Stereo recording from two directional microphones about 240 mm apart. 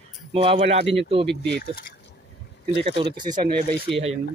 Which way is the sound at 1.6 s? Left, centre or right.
Left.